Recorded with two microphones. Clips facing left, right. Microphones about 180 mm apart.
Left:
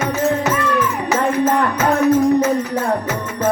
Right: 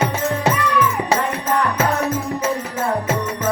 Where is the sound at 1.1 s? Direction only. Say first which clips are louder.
Left 4 dB; 30° right (ahead or behind).